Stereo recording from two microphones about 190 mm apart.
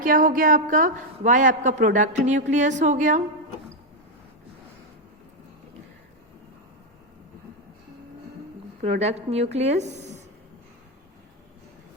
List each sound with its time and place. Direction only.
0.0 s a woman's voice: 45° right (ahead or behind)
8.8 s a woman's voice: 35° right (ahead or behind)